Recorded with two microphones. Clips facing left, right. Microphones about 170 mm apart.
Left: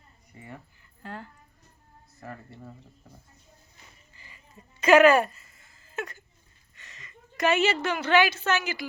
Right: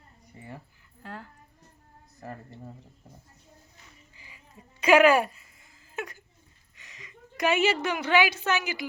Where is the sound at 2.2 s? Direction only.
35° right (ahead or behind).